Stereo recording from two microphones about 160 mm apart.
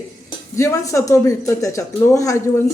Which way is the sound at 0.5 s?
20° left (ahead or behind).